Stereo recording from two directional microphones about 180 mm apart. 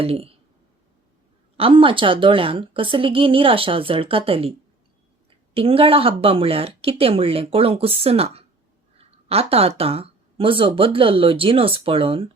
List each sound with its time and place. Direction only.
0.0 s speech: 30° right (ahead or behind)
1.5 s a woman's voice: 30° right (ahead or behind)
5.5 s speech: 30° right (ahead or behind)